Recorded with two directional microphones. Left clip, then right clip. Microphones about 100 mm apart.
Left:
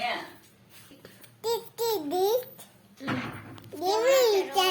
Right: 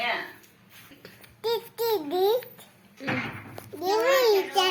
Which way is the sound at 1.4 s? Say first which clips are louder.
Right 2 dB; 25° left (ahead or behind).